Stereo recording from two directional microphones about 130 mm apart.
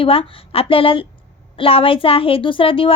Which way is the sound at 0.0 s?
45° left (ahead or behind).